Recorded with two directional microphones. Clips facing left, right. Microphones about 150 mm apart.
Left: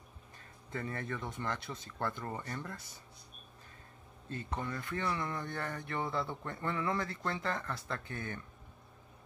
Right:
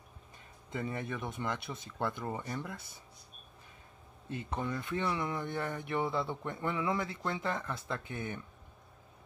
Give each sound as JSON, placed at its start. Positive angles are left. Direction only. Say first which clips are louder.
{"t": 0.7, "sound": "speech", "louder": "right 2 dB", "side_deg": -15}
{"t": 4.3, "sound": "speech", "louder": "right 3 dB", "side_deg": -15}